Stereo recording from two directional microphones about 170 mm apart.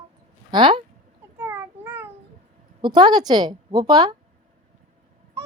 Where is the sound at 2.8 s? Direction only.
25° right (ahead or behind).